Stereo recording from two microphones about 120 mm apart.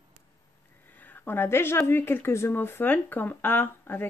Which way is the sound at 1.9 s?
20° left (ahead or behind).